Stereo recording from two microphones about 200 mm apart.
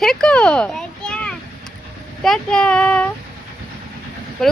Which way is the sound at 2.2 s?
5° left (ahead or behind).